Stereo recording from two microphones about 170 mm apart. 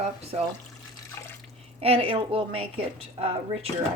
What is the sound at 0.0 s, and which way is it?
Speech, 35° right (ahead or behind).